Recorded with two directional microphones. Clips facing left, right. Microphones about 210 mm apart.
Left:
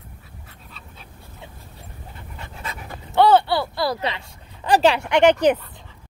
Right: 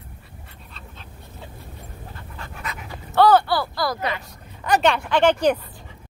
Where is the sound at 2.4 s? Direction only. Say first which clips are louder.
Even; 30° left (ahead or behind).